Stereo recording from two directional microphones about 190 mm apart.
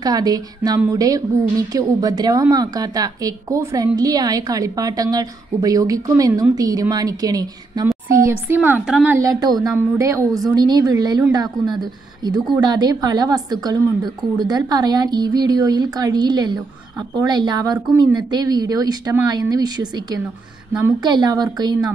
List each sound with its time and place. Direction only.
0.0 s a woman's voice: 20° right (ahead or behind)